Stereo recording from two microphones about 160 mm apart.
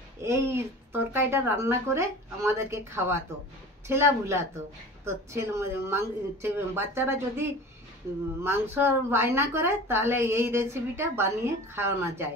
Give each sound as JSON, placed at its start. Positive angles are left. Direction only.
{"t": 0.2, "sound": "a woman's voice", "side_deg": -15}